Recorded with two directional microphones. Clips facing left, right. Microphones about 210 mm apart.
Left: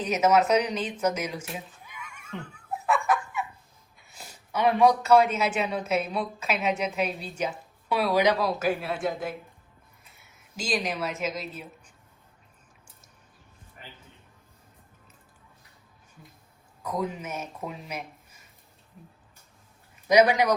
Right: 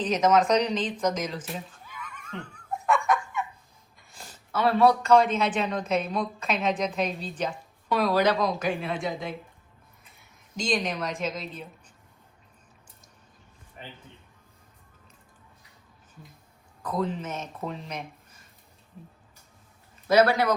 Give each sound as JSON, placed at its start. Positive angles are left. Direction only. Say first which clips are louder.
{"t": 0.0, "sound": "a woman's voice", "louder": "even", "side_deg": 10}
{"t": 1.0, "sound": "giggle", "louder": "even", "side_deg": 10}
{"t": 3.9, "sound": "a sound", "louder": "even", "side_deg": 5}
{"t": 5.5, "sound": "a woman's voice", "louder": "even", "side_deg": 10}
{"t": 16.8, "sound": "speech", "louder": "right 2 dB", "side_deg": 10}
{"t": 20.1, "sound": "a woman's voice", "louder": "left 1 dB", "side_deg": 15}